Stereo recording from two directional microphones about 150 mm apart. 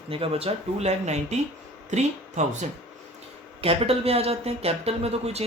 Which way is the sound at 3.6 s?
40° right (ahead or behind).